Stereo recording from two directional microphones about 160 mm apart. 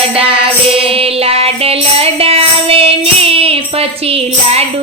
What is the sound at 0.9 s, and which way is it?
Music, 35° right (ahead or behind).